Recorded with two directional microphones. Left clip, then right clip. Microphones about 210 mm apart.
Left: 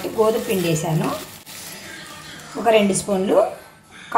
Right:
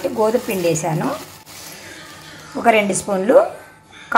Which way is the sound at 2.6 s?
35° right (ahead or behind).